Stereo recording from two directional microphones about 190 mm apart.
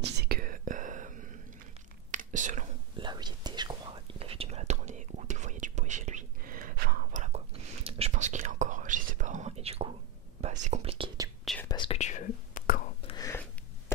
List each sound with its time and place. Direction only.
0.0 s whispering: 55° right (ahead or behind)
3.0 s whispering: 25° right (ahead or behind)
11.7 s whispering: 30° left (ahead or behind); by 12.8 s 45° left (ahead or behind)
13.0 s a sound: 20° left (ahead or behind)